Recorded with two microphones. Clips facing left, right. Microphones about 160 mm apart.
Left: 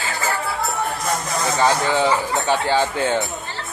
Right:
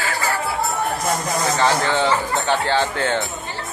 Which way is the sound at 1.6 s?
10° left (ahead or behind).